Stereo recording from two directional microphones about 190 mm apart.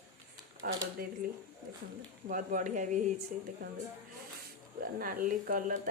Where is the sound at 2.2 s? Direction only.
45° right (ahead or behind).